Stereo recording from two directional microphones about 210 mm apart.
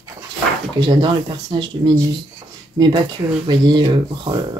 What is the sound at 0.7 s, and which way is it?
Speech, 20° right (ahead or behind).